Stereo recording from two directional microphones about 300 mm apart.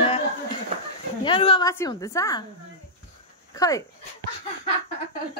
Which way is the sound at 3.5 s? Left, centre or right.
Centre.